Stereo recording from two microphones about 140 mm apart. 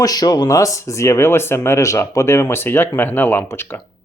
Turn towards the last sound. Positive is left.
turn(degrees=15)  # may be behind; listen again after turning